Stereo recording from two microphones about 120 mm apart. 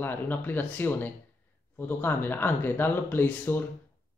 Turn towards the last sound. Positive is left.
turn(degrees=15)  # may be behind; listen again after turning